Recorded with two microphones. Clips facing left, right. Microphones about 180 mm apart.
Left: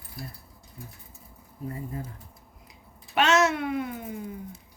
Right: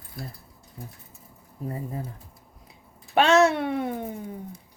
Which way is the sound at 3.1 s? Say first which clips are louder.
Right 4 dB; 35° right (ahead or behind).